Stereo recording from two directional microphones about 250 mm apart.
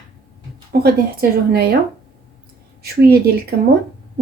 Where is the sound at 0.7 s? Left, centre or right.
Right.